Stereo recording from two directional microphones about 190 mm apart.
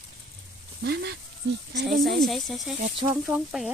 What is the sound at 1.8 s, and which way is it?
Speech, centre (ahead or behind).